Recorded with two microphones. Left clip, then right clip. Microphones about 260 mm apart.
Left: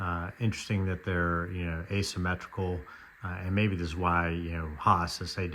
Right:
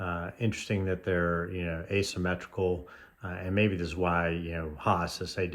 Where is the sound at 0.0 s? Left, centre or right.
Left.